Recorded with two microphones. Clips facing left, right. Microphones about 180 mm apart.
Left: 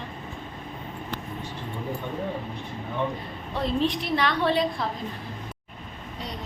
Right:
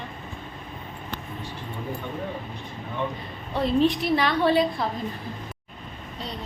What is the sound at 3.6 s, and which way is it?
A woman's voice, centre (ahead or behind).